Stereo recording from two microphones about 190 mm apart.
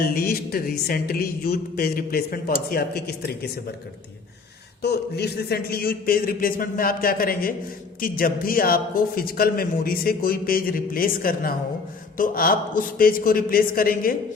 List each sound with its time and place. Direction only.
0.1 s a man's voice: 50° left (ahead or behind)
4.8 s a man's voice: 60° left (ahead or behind)